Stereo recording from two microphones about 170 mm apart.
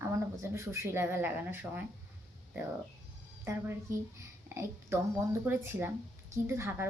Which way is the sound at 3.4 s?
15° right (ahead or behind).